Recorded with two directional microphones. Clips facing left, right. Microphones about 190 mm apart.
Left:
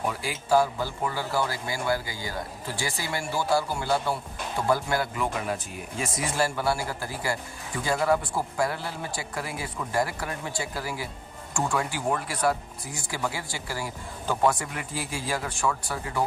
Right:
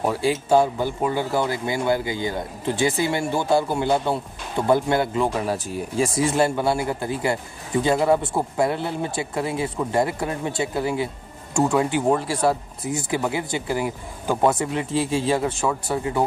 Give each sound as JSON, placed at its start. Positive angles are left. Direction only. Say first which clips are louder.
{"t": 0.0, "sound": "speech", "louder": "right 9 dB", "side_deg": -30}